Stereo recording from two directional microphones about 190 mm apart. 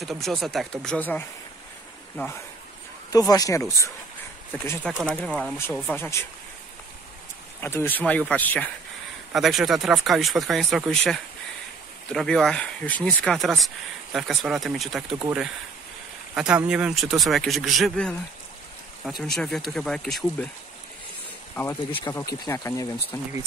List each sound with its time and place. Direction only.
0.0 s speech: centre (ahead or behind)
7.6 s speech: 10° left (ahead or behind)
16.3 s speech: 5° right (ahead or behind)
19.2 s speech: centre (ahead or behind)
22.1 s speech: 15° left (ahead or behind)